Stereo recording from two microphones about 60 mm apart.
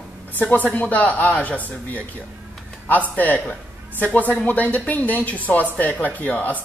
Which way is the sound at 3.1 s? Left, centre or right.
Left.